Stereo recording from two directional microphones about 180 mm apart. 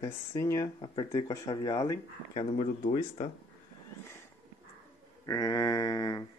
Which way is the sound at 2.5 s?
35° left (ahead or behind).